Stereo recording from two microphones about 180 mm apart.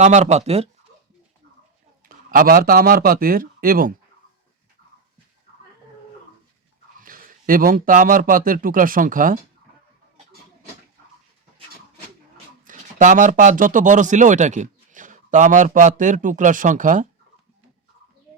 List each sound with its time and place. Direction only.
0.0 s speech: 40° right (ahead or behind)
2.0 s speech: 50° right (ahead or behind)
7.0 s speech: 50° right (ahead or behind)
12.6 s speech: 45° right (ahead or behind)